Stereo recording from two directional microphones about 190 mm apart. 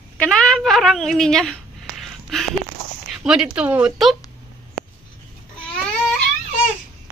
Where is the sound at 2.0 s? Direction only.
Centre (ahead or behind).